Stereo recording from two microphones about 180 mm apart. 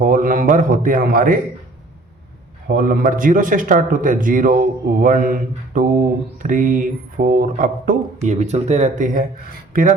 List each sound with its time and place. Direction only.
0.0 s speech: 45° right (ahead or behind)
2.6 s speech: 55° right (ahead or behind)